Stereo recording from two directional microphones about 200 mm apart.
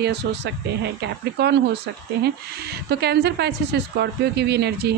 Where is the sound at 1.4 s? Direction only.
55° right (ahead or behind).